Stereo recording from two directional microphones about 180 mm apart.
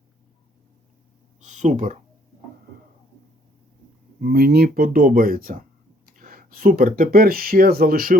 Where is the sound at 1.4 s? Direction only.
40° right (ahead or behind).